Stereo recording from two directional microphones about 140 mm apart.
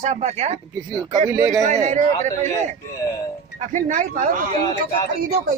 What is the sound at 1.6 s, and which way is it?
Speech, 60° right (ahead or behind).